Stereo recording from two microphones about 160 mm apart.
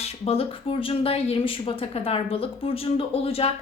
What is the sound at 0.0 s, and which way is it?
Speech, 40° left (ahead or behind).